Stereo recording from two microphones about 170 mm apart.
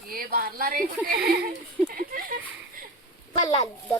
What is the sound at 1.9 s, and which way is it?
Speech, 60° right (ahead or behind).